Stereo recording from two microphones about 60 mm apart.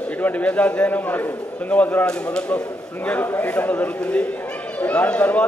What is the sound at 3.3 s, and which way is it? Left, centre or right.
A man's voice, left.